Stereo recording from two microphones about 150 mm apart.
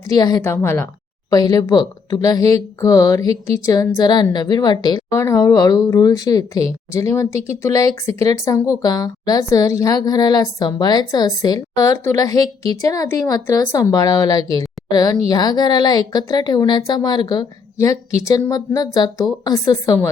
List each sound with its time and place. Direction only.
0.1 s a woman's voice: 25° left (ahead or behind)